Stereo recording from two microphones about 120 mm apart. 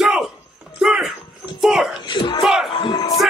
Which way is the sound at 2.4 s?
Centre (ahead or behind).